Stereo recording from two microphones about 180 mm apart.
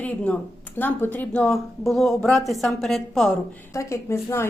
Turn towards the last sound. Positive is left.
turn(degrees=15)  # may be behind; listen again after turning